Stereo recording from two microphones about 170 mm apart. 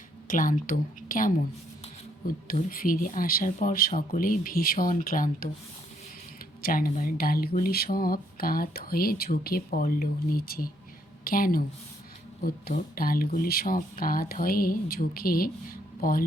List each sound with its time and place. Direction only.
0.3 s a woman's voice: 50° left (ahead or behind)
6.6 s a woman's voice: 55° left (ahead or behind)